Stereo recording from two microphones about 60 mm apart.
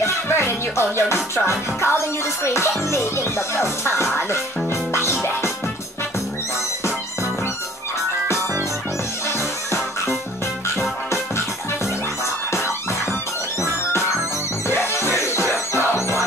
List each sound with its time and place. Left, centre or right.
0.0 s music: left
10.8 s music: left
14.7 s music: left